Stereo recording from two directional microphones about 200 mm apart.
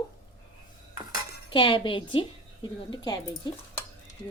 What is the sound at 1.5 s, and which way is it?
A woman's voice, 25° left (ahead or behind).